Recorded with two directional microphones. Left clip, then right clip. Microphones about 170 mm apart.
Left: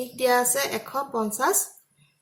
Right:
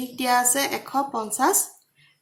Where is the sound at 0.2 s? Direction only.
50° right (ahead or behind).